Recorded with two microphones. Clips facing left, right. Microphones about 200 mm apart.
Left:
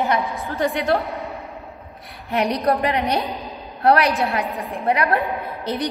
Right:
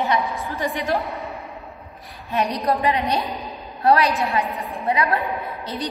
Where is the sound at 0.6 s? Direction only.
65° left (ahead or behind).